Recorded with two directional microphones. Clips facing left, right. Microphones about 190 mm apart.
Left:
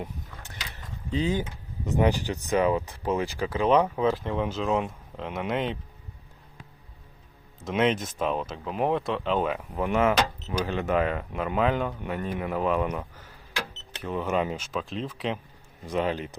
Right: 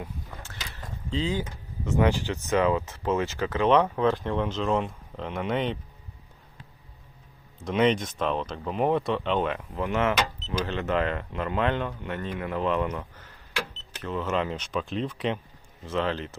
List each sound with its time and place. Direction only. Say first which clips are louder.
0.0 s a sound: left 1 dB; 20° left (ahead or behind)
1.1 s speech: left 2 dB; 20° left (ahead or behind); by 5.7 s centre (ahead or behind)
7.6 s speech: right 2 dB; centre (ahead or behind)
15.9 s speech: left 1 dB; 15° left (ahead or behind)